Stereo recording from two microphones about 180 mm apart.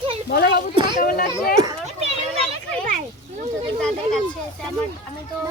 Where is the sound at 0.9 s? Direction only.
55° left (ahead or behind).